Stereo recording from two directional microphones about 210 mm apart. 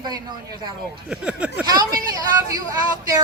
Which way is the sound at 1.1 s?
5° right (ahead or behind).